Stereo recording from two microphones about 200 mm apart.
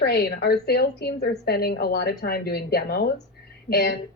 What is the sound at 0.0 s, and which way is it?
A woman's voice, 55° left (ahead or behind).